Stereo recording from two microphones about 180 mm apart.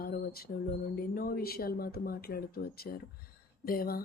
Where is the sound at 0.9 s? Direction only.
55° left (ahead or behind).